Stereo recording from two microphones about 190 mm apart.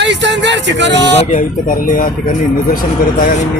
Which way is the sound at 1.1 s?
35° left (ahead or behind).